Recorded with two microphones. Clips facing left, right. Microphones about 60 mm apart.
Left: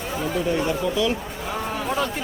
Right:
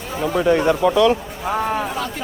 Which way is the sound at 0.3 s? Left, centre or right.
Right.